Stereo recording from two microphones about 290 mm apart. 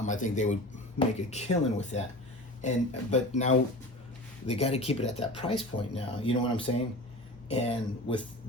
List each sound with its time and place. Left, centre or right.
0.0 s speech: left